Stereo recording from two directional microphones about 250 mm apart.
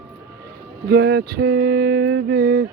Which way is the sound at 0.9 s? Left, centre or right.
Right.